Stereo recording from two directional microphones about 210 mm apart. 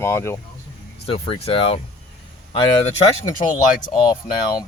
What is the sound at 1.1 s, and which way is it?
Speech, 25° left (ahead or behind).